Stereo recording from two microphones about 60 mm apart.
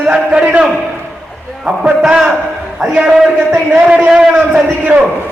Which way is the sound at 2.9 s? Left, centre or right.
Centre.